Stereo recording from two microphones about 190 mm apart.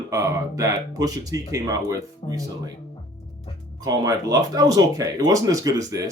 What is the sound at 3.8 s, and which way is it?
Speech, 20° right (ahead or behind).